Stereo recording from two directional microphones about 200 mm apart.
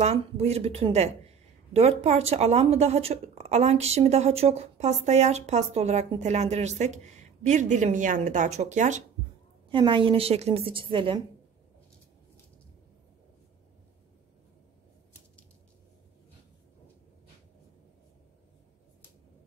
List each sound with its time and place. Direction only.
0.0 s speech: 30° right (ahead or behind)
9.7 s a woman's voice: 25° right (ahead or behind)